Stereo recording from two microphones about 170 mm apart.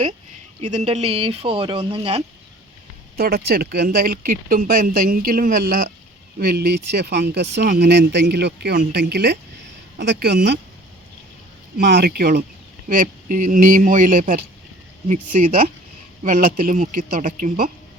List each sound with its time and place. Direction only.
0.6 s speech: 40° right (ahead or behind)
3.2 s speech: 65° right (ahead or behind)
11.8 s a man's voice: 75° right (ahead or behind); by 17.7 s 50° right (ahead or behind)